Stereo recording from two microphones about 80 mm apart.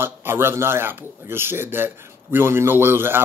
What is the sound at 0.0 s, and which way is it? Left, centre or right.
Speech, right.